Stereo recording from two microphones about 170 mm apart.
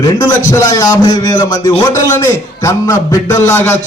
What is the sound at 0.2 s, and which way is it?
A man's voice, 20° left (ahead or behind).